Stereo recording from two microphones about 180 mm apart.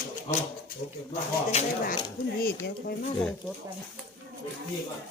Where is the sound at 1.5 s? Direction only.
40° left (ahead or behind).